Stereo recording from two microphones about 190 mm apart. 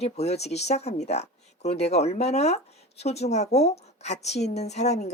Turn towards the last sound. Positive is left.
turn(degrees=35)  # may be behind; listen again after turning